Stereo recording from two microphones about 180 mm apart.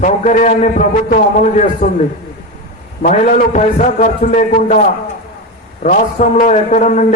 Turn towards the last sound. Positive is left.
turn(degrees=40)  # may be behind; listen again after turning